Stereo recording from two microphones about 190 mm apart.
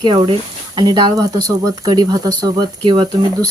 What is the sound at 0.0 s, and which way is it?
Speech, 25° right (ahead or behind).